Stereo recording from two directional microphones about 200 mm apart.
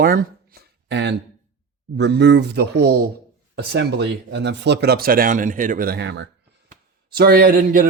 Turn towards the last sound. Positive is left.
turn(degrees=-50)  # may be behind; listen again after turning